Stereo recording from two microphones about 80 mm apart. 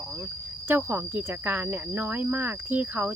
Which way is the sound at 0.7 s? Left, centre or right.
Right.